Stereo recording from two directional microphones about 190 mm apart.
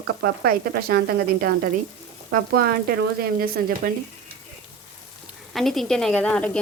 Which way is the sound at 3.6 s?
50° right (ahead or behind).